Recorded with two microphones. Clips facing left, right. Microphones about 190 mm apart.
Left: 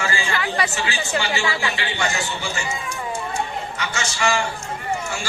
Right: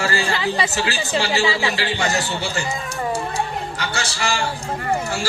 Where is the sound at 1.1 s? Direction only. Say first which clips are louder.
Right 4 dB; 35° right (ahead or behind).